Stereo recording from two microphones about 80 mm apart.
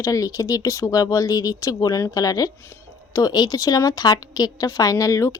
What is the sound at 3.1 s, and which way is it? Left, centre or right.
A woman's voice, left.